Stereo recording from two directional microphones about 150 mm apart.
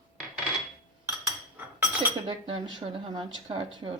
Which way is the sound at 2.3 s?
35° right (ahead or behind).